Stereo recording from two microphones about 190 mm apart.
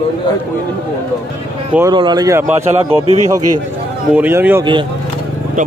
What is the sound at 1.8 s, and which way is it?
Speech, 20° right (ahead or behind).